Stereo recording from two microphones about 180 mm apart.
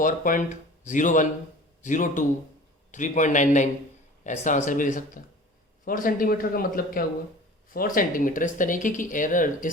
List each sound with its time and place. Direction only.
0.0 s speech: 45° left (ahead or behind)